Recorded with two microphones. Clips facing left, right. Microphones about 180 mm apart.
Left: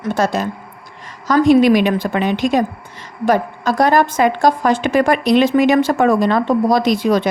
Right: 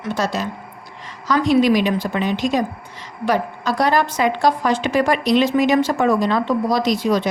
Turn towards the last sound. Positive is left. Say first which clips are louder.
# left 3 dB
turn(degrees=55)  # may be behind; listen again after turning